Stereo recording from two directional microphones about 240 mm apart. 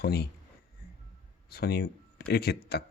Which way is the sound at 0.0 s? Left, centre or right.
Left.